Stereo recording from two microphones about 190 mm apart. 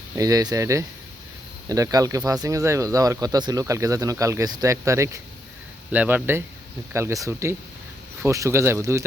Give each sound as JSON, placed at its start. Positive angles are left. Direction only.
{"t": 0.2, "sound": "speech", "side_deg": -20}